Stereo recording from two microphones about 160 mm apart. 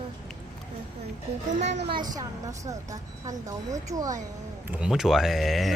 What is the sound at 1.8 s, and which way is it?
A woman's voice, 30° right (ahead or behind).